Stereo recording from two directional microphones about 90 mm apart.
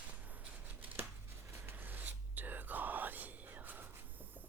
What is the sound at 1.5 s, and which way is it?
Whispering, 25° right (ahead or behind).